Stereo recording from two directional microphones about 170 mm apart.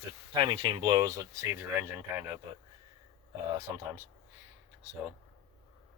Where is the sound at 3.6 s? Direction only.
15° right (ahead or behind).